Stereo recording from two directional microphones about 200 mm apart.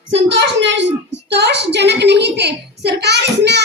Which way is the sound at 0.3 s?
60° right (ahead or behind).